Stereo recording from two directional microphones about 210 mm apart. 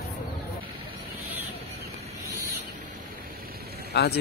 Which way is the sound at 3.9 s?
50° left (ahead or behind).